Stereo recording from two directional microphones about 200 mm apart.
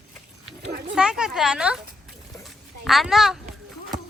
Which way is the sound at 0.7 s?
45° right (ahead or behind).